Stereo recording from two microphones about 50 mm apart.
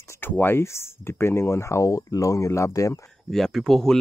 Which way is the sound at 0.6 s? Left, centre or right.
Left.